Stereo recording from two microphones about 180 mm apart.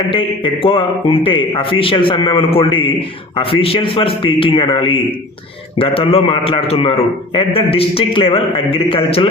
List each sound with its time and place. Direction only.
0.1 s a man's voice: 30° left (ahead or behind)